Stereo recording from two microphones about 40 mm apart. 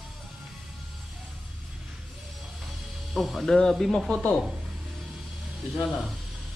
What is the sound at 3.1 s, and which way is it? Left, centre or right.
Speech, centre.